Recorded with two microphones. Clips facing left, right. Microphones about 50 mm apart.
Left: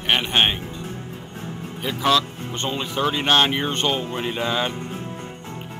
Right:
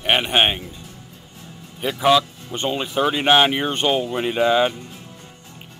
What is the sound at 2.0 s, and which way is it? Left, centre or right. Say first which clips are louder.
Speech: right 3 dB; centre.